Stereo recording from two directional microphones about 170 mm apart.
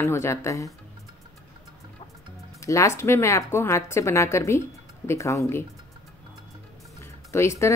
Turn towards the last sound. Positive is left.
turn(degrees=15)  # may be behind; listen again after turning